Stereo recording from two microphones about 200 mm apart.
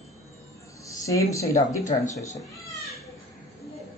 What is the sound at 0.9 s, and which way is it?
Speech, 15° left (ahead or behind).